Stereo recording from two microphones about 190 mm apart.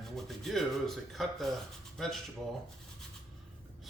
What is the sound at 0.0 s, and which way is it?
Speech, centre (ahead or behind).